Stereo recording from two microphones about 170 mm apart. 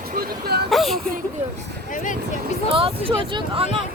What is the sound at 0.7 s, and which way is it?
Speech, centre (ahead or behind).